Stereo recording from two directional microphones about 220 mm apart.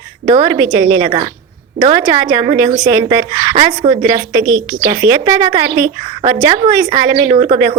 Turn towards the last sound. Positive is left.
turn(degrees=-25)  # may be behind; listen again after turning